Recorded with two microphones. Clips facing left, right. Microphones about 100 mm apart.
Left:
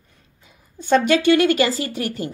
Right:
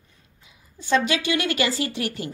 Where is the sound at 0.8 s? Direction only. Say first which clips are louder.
Left 5 dB; 50° left (ahead or behind).